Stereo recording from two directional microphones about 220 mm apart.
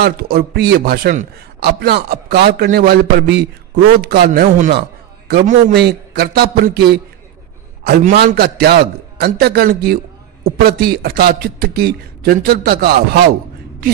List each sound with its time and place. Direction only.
0.0 s a man's voice: 45° right (ahead or behind)